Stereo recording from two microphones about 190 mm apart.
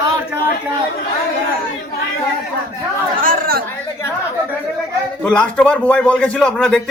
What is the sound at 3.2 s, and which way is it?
Chatter, 50° right (ahead or behind).